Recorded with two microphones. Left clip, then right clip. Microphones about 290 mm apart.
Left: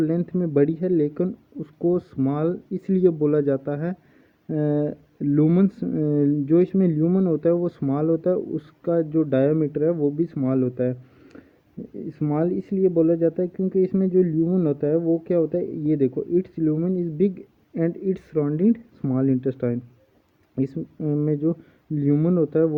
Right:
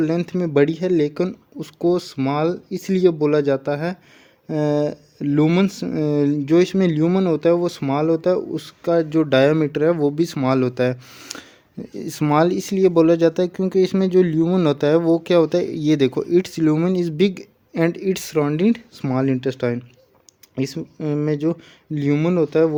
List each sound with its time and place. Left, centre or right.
0.0 s speech: centre
12.0 s speech: centre